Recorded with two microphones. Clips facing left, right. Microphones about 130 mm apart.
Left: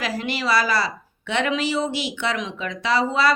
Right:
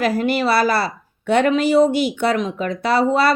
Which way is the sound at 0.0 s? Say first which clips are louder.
Right 8 dB; 50° right (ahead or behind).